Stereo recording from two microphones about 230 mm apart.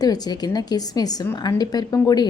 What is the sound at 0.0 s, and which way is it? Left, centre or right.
A woman's voice, centre.